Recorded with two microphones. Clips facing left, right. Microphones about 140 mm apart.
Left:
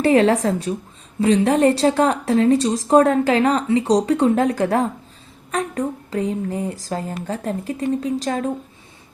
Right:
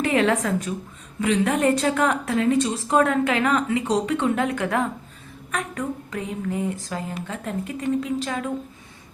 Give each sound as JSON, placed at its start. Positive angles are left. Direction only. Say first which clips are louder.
{"t": 0.0, "sound": "a woman's voice", "louder": "left 6 dB", "side_deg": 35}